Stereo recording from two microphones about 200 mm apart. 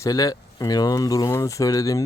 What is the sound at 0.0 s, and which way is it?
Speech, 15° left (ahead or behind).